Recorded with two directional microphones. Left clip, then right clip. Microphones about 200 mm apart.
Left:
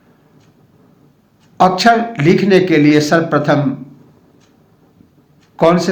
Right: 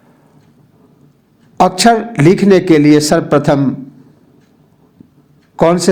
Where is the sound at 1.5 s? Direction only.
50° right (ahead or behind).